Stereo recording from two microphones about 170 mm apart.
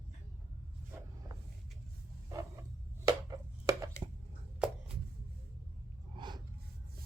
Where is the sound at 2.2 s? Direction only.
20° right (ahead or behind).